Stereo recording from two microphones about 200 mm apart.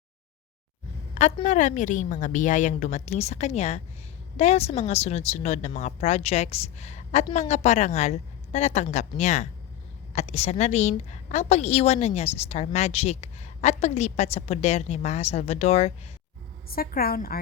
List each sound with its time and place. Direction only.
1.1 s a woman's voice: 35° left (ahead or behind)
16.6 s a woman's voice: 50° left (ahead or behind)